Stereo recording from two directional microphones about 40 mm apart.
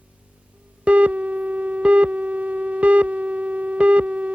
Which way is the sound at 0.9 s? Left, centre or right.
Right.